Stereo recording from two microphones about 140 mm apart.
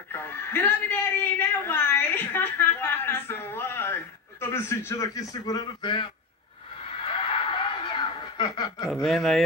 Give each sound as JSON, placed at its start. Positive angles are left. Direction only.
{"t": 0.1, "sound": "a sound", "side_deg": 15}
{"t": 7.1, "sound": "chuckle", "side_deg": 40}
{"t": 8.8, "sound": "speech", "side_deg": 0}